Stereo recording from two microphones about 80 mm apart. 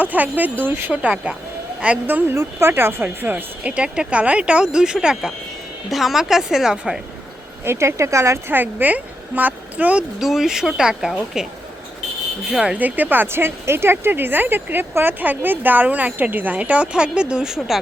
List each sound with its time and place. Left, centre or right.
0.0 s speech: centre
2.3 s speech: right; by 7.0 s centre
7.6 s speech: right
8.5 s speech: right
10.2 s speech: centre
12.5 s speech: centre
12.8 s speech: right; by 17.7 s centre